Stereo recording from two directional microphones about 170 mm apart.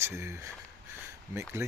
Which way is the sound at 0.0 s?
15° right (ahead or behind).